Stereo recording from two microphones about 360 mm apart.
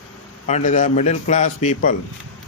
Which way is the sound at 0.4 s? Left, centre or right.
Centre.